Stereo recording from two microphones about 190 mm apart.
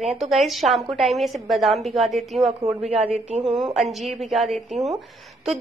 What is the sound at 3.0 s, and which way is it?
Speech, 30° right (ahead or behind).